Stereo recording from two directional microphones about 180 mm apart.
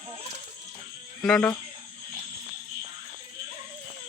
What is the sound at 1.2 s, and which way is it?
Speech, centre (ahead or behind).